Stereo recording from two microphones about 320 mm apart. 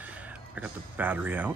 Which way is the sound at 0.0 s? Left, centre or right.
Centre.